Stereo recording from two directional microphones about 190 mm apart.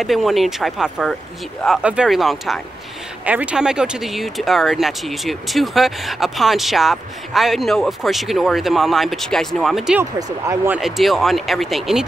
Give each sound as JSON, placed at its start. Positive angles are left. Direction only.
{"t": 0.0, "sound": "speech", "side_deg": 0}
{"t": 10.1, "sound": "speech", "side_deg": -15}
{"t": 10.8, "sound": "speech", "side_deg": 0}